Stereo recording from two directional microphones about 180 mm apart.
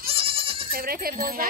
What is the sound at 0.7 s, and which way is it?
Speech, 55° right (ahead or behind).